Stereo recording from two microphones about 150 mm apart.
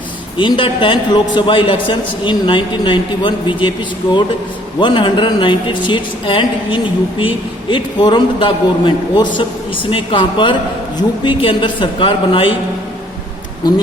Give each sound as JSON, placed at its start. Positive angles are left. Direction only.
{"t": 0.3, "sound": "a woman's voice", "side_deg": 35}
{"t": 4.8, "sound": "a woman's voice", "side_deg": 30}
{"t": 13.6, "sound": "speech", "side_deg": 30}